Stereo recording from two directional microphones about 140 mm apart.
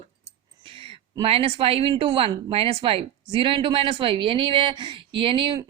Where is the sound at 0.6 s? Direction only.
45° right (ahead or behind).